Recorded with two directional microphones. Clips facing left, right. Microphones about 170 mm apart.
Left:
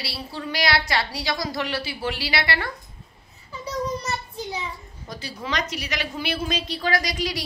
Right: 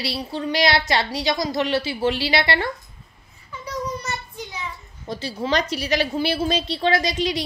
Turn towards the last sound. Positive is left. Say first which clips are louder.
# right 4 dB
turn(degrees=-25)  # may be behind; listen again after turning